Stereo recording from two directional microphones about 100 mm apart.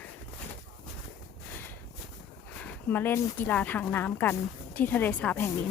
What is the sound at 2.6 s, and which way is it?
Speech, 15° left (ahead or behind).